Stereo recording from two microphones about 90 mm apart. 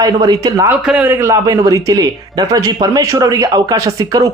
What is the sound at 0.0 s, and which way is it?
Speech, 50° right (ahead or behind).